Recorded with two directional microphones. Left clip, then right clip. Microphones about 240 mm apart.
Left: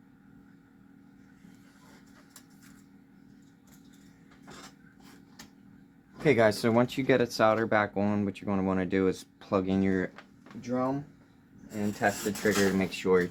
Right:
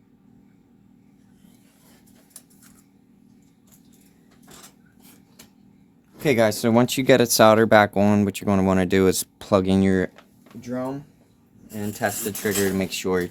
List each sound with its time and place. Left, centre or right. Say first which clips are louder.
6.2 s speech: right 4 dB; right
11.8 s speech: right 3 dB; right